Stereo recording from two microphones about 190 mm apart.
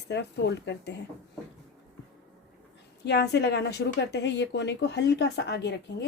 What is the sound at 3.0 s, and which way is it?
Speech, 60° left (ahead or behind).